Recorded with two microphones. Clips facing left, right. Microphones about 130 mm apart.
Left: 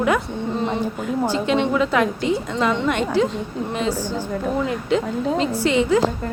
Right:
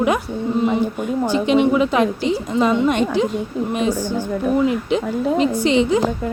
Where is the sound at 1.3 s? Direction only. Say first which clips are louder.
Right 6 dB; 15° right (ahead or behind).